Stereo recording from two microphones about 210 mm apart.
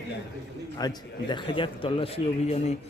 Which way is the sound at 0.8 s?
20° left (ahead or behind).